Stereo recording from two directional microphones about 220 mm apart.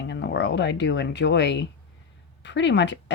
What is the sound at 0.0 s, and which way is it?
Speech, 55° left (ahead or behind).